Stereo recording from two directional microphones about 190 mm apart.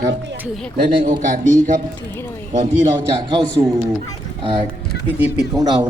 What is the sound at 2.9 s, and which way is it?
A man's voice, 25° right (ahead or behind).